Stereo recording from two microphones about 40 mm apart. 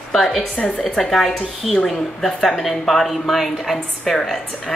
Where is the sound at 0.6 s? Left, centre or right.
Left.